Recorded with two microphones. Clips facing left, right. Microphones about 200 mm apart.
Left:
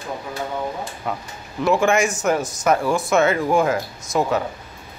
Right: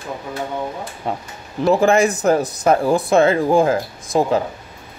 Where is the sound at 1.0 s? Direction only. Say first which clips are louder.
Right 2 dB; 30° right (ahead or behind).